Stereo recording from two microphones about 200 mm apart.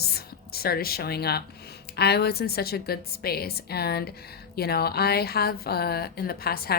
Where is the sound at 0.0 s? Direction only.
50° left (ahead or behind).